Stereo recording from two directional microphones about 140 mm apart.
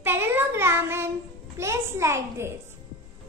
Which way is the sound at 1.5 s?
20° right (ahead or behind).